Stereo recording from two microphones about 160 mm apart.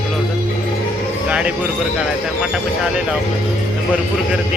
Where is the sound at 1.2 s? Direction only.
5° right (ahead or behind).